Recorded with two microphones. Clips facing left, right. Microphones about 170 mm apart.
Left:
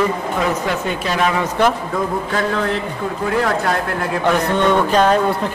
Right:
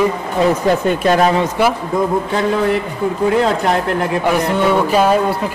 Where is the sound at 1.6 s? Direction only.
10° right (ahead or behind).